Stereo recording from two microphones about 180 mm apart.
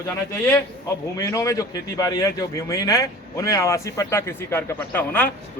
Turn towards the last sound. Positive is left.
turn(degrees=10)  # may be behind; listen again after turning